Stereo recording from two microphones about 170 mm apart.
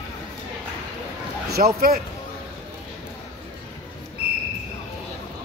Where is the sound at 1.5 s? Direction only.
60° right (ahead or behind).